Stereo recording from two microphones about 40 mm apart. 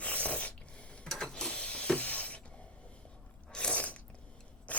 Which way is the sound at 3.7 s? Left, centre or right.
Left.